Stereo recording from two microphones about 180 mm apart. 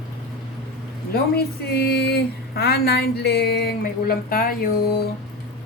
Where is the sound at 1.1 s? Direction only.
60° left (ahead or behind).